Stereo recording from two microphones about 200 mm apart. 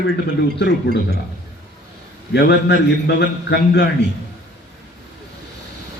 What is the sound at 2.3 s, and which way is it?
A man's voice, 60° left (ahead or behind).